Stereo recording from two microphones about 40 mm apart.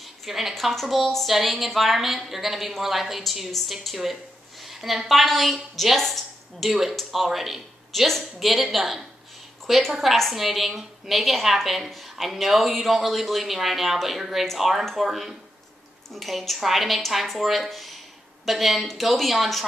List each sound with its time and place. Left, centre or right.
0.0 s a woman's voice: centre
6.7 s a woman's voice: centre